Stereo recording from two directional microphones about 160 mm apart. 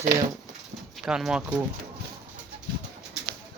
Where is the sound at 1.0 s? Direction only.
5° right (ahead or behind).